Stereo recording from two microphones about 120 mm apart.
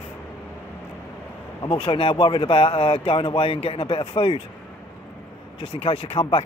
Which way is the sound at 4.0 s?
35° left (ahead or behind).